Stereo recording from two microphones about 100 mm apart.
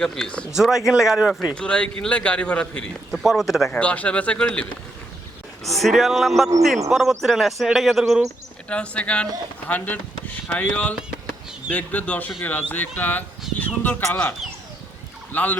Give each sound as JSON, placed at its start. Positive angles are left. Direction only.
{"t": 0.0, "sound": "speech", "side_deg": 5}
{"t": 0.5, "sound": "speech", "side_deg": -5}
{"t": 1.5, "sound": "speech", "side_deg": 10}
{"t": 3.1, "sound": "speech", "side_deg": -5}
{"t": 3.7, "sound": "speech", "side_deg": 15}
{"t": 5.6, "sound": "speech", "side_deg": 0}
{"t": 8.7, "sound": "speech", "side_deg": 10}
{"t": 15.3, "sound": "fowl", "side_deg": 15}